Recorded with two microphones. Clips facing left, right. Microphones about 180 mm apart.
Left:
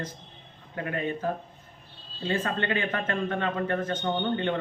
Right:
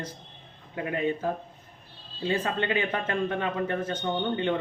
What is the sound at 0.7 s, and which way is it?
A man's voice, 20° right (ahead or behind).